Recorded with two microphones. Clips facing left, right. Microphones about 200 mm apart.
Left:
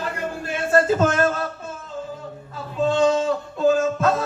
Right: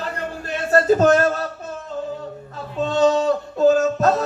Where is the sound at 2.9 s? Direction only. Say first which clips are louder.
Right 2 dB; 40° right (ahead or behind).